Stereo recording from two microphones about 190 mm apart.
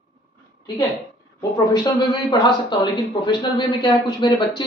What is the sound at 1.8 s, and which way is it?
A man's voice, 25° left (ahead or behind).